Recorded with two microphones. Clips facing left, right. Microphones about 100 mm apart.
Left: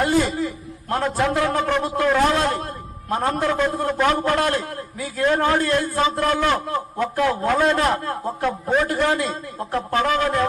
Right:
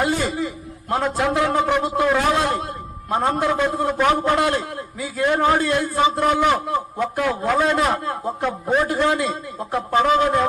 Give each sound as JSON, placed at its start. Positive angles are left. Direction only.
{"t": 0.0, "sound": "a sound", "side_deg": -20}
{"t": 1.3, "sound": "a man's voice", "side_deg": -15}
{"t": 8.4, "sound": "a man's voice", "side_deg": -5}
{"t": 8.9, "sound": "a man's voice", "side_deg": -20}